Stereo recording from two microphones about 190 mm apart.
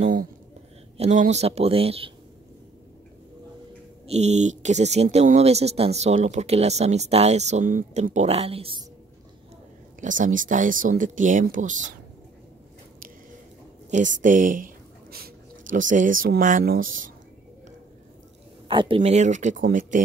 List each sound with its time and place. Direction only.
0.0 s a sound: 40° right (ahead or behind)
0.9 s speech: 35° right (ahead or behind)
4.1 s speech: 35° right (ahead or behind)
9.9 s speech: 45° right (ahead or behind)
13.8 s speech: 40° right (ahead or behind)
18.7 s speech: 25° right (ahead or behind)
18.9 s speech: 40° right (ahead or behind)